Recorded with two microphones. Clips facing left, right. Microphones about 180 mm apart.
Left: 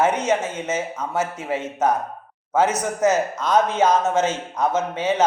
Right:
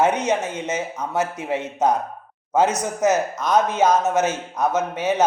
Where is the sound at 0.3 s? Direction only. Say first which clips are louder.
Left 1 dB; 15° right (ahead or behind).